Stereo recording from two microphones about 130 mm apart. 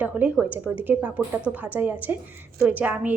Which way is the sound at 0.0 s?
10° right (ahead or behind).